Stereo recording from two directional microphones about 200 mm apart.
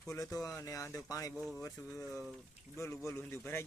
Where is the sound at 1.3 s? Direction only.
Centre (ahead or behind).